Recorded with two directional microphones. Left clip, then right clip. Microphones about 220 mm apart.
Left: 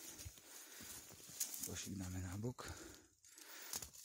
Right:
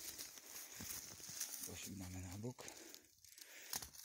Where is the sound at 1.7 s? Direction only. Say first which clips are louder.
Left 3 dB; 30° left (ahead or behind).